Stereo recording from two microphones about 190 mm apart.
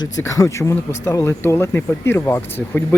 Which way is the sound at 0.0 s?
15° left (ahead or behind).